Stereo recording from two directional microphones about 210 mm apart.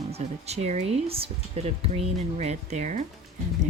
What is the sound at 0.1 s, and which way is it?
Speech, 30° right (ahead or behind).